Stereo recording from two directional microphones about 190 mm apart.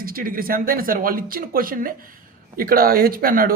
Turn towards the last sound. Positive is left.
turn(degrees=-50)  # may be behind; listen again after turning